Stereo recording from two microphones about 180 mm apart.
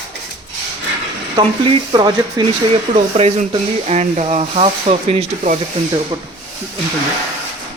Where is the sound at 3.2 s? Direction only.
35° right (ahead or behind).